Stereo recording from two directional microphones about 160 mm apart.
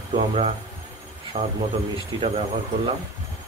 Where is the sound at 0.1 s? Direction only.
35° right (ahead or behind).